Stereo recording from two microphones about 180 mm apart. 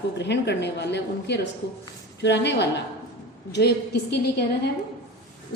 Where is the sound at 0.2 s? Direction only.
70° left (ahead or behind).